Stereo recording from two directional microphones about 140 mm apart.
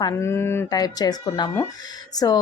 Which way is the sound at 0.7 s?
30° left (ahead or behind).